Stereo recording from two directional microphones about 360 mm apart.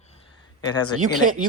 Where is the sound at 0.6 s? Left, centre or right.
Centre.